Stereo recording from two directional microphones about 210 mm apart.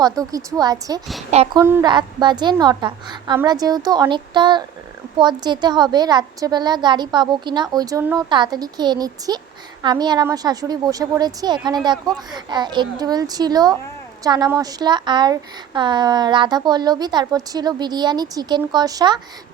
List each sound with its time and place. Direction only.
0.0 s a woman's voice: 15° right (ahead or behind)